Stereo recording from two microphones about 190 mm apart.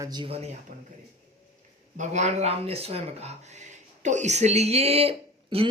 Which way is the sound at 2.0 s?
35° right (ahead or behind).